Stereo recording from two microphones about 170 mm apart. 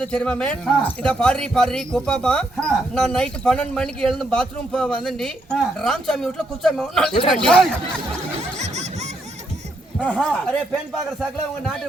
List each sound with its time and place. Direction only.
0.0 s speech: 5° left (ahead or behind)
8.5 s snicker: 40° right (ahead or behind)
10.0 s speech: 5° left (ahead or behind)